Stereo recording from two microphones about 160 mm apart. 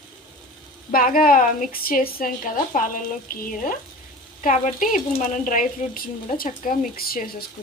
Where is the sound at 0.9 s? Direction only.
60° left (ahead or behind).